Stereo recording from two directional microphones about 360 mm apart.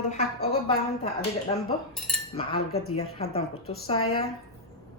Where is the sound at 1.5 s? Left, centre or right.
Centre.